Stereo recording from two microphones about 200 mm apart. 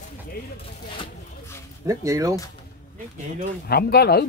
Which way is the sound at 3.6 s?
50° left (ahead or behind).